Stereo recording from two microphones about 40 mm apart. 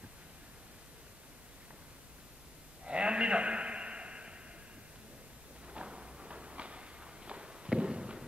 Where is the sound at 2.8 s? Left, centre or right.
Right.